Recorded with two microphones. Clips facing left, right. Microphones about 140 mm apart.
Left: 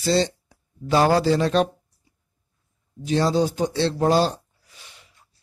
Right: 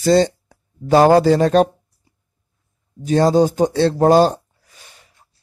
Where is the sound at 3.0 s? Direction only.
50° right (ahead or behind).